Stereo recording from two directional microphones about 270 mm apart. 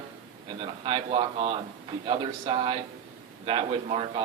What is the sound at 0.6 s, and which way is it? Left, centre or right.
A man's voice, right.